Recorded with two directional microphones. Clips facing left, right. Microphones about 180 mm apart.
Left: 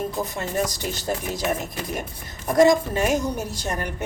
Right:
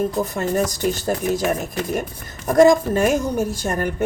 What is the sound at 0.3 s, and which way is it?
Speech, 50° right (ahead or behind).